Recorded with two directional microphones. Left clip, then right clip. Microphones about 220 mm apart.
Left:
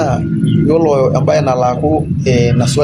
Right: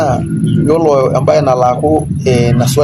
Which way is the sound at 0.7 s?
45° right (ahead or behind).